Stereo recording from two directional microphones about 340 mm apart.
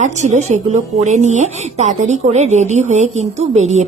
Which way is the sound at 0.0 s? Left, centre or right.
Centre.